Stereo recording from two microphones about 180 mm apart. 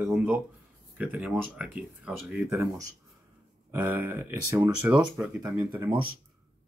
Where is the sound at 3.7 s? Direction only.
10° right (ahead or behind).